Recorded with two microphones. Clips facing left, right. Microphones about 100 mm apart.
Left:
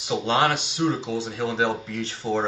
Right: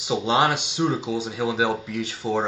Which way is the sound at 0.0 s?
15° right (ahead or behind).